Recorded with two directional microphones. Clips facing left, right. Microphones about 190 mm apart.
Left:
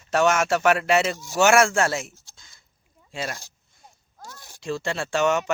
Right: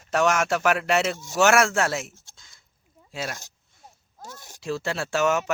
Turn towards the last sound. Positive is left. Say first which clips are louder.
# left 1 dB
turn(degrees=-5)  # may be behind; listen again after turning